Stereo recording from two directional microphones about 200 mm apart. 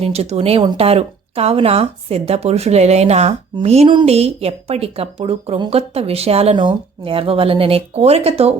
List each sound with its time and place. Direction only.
0.0 s speech: 30° right (ahead or behind)